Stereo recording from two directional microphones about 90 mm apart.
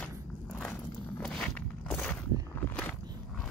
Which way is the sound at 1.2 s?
10° left (ahead or behind).